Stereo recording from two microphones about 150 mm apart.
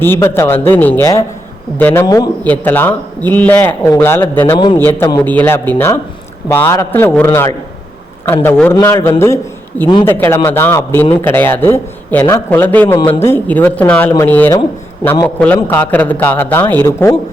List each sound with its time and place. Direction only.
0.0 s speech: 15° left (ahead or behind)
2.0 s a man's voice: 25° left (ahead or behind)
2.4 s speech: 10° left (ahead or behind)
4.5 s a man's voice: 30° left (ahead or behind)
4.8 s speech: 15° left (ahead or behind)